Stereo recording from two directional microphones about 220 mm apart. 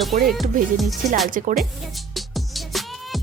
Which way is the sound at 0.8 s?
Centre (ahead or behind).